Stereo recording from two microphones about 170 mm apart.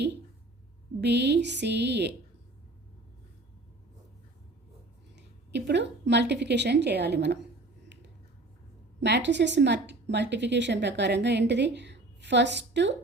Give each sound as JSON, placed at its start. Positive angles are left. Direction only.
{"t": 1.0, "sound": "a woman's voice", "side_deg": -80}
{"t": 5.1, "sound": "a woman's voice", "side_deg": -90}
{"t": 9.0, "sound": "a woman's voice", "side_deg": -90}